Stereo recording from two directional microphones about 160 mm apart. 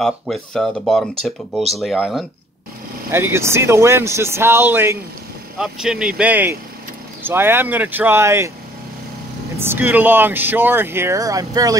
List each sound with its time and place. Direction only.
0.0 s speech: centre (ahead or behind)
3.1 s speech: 15° right (ahead or behind)
9.6 s speech: 15° right (ahead or behind)